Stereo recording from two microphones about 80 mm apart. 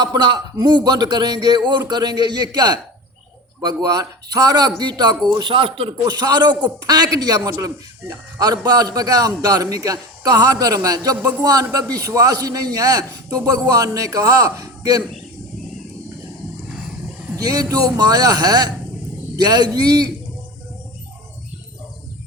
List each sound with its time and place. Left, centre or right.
0.0 s a man's voice: right
17.3 s a man's voice: right